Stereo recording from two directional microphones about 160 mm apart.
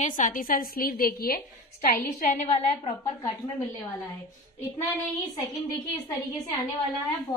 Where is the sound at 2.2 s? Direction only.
45° left (ahead or behind).